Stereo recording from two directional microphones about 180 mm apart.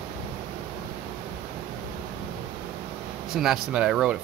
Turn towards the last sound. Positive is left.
turn(degrees=-5)  # may be behind; listen again after turning